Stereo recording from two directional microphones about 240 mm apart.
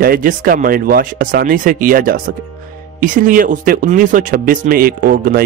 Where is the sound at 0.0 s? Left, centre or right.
Right.